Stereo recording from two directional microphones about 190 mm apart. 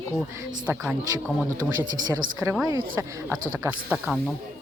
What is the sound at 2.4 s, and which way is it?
Speech, 5° right (ahead or behind).